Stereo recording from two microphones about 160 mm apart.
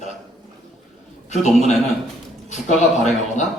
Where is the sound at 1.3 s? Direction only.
45° left (ahead or behind).